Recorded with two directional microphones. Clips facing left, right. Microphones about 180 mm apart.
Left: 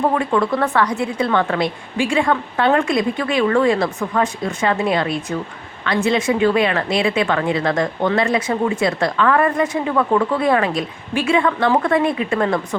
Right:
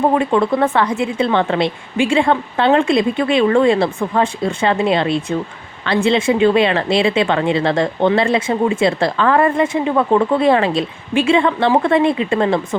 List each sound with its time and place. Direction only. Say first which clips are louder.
0.1 s speech: right 3 dB; 25° right (ahead or behind)